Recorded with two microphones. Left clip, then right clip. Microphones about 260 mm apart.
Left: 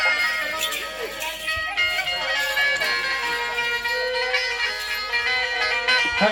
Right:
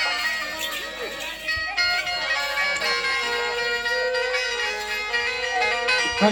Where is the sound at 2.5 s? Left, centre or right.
Right.